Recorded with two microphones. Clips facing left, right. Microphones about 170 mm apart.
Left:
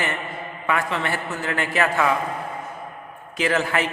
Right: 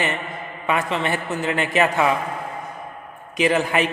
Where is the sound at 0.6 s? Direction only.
20° right (ahead or behind).